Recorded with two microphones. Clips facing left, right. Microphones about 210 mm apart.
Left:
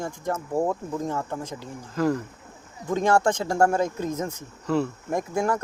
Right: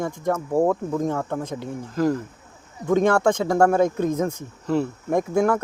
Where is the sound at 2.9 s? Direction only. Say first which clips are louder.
Right 3 dB; 60° right (ahead or behind).